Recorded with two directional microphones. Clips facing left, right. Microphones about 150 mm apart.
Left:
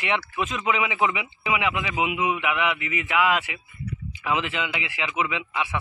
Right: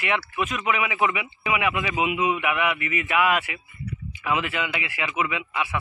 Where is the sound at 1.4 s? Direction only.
10° left (ahead or behind).